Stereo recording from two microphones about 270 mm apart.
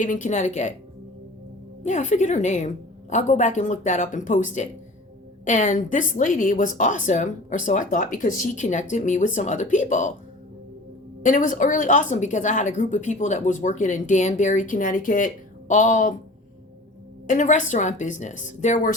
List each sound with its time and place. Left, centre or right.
0.0 s speech: left
1.8 s speech: left
11.2 s speech: left
17.2 s speech: left